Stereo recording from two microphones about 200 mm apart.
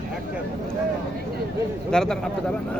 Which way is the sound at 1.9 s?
5° left (ahead or behind).